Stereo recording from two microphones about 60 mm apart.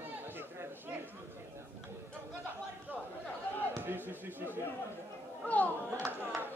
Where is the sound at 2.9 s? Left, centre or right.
Right.